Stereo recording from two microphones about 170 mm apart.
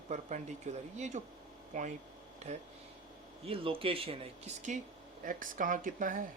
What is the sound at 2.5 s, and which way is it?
Speech, 40° right (ahead or behind).